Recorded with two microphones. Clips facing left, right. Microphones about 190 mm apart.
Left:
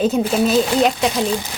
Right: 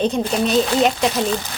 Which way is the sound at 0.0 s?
5° left (ahead or behind).